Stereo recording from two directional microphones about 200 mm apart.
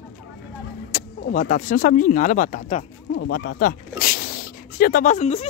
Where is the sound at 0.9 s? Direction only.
45° left (ahead or behind).